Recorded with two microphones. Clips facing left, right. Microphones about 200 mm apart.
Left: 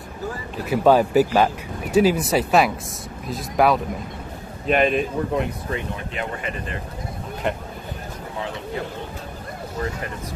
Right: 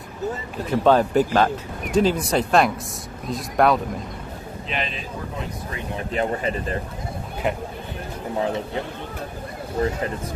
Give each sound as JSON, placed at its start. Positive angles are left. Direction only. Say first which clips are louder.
{"t": 0.7, "sound": "speech", "louder": "left 1 dB", "side_deg": 10}
{"t": 4.6, "sound": "speech", "louder": "left 12 dB", "side_deg": 55}
{"t": 6.1, "sound": "speech", "louder": "right 8 dB", "side_deg": -35}
{"t": 9.8, "sound": "speech", "louder": "right 5 dB", "side_deg": -40}